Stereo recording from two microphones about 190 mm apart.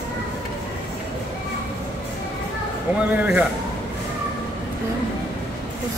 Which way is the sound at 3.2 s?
10° right (ahead or behind).